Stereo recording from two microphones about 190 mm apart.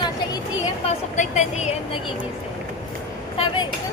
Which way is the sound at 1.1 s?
40° left (ahead or behind).